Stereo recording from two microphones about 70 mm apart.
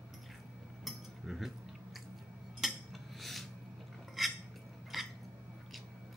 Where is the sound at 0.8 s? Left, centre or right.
Centre.